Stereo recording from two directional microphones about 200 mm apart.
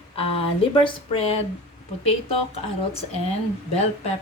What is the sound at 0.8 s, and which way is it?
Speech, 25° left (ahead or behind).